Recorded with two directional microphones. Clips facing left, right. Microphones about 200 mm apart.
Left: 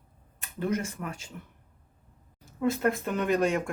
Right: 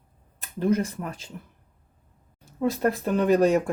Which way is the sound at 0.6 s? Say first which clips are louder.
Right 6 dB; 35° right (ahead or behind).